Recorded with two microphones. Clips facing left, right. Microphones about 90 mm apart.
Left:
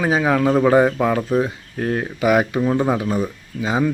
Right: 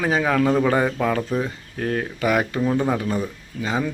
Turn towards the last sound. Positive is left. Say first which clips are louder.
# left 3 dB
turn(degrees=15)  # may be behind; listen again after turning